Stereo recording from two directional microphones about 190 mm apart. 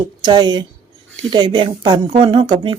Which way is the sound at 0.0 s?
25° right (ahead or behind).